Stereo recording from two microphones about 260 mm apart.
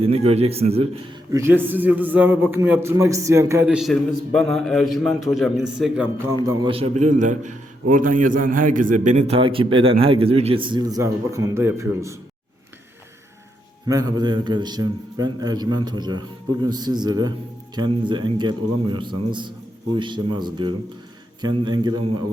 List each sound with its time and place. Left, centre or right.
0.0 s a man's voice: right
1.3 s a man's voice: centre
6.4 s a man's voice: centre
13.8 s a man's voice: centre